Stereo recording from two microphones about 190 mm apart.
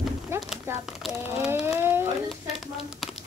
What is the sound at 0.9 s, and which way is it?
Speech, centre (ahead or behind).